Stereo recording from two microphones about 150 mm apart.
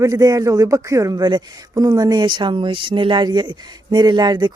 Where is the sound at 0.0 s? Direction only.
25° right (ahead or behind).